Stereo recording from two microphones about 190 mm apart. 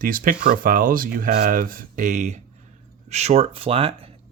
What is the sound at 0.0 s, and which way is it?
Speech, 50° right (ahead or behind).